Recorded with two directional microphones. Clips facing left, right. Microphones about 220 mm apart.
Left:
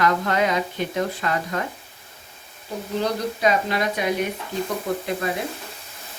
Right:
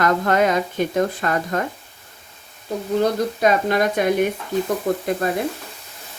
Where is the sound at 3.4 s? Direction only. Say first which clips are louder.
Right 3 dB; 50° right (ahead or behind).